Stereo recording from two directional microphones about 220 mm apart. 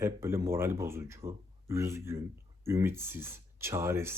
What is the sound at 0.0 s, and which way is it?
Speech, 10° right (ahead or behind).